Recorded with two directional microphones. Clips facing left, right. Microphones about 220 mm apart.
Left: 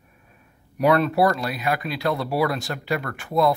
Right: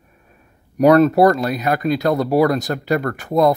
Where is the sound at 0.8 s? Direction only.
40° right (ahead or behind).